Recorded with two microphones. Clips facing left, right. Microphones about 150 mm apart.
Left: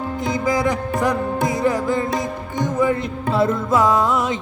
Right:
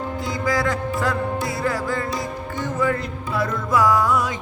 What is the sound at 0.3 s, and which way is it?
Music, 20° left (ahead or behind).